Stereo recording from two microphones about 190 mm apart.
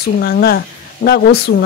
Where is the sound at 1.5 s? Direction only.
75° left (ahead or behind).